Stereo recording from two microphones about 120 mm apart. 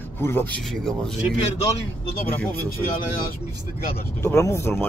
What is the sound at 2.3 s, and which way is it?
Speech, 15° left (ahead or behind).